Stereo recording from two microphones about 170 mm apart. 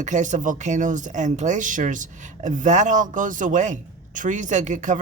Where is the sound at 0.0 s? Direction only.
45° right (ahead or behind).